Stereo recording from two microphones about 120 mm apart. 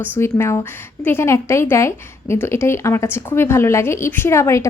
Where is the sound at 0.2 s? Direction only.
20° left (ahead or behind).